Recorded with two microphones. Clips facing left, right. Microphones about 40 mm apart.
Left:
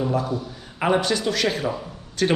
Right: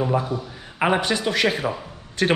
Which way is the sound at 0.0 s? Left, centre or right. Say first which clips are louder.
Right 1 dB; right.